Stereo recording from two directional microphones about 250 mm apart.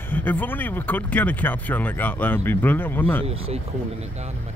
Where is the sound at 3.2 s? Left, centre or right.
Right.